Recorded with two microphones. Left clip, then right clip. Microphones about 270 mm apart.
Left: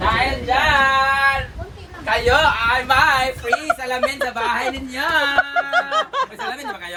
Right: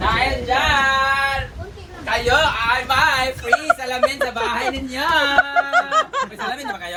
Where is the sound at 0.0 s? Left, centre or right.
Left.